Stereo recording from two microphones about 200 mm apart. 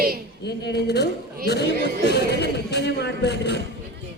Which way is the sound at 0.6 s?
55° left (ahead or behind).